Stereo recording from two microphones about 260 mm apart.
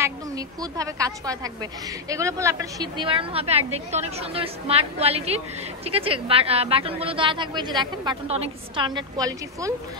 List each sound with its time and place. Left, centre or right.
0.0 s a woman's voice: centre